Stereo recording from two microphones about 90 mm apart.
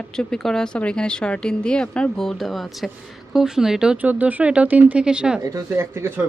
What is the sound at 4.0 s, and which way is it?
A woman's voice, 15° right (ahead or behind).